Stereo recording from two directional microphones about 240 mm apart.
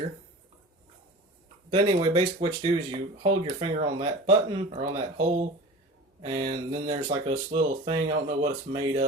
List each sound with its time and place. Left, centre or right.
1.7 s speech: right
6.2 s speech: right